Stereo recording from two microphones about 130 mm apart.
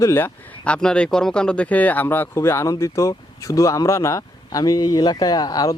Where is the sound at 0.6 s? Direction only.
5° left (ahead or behind).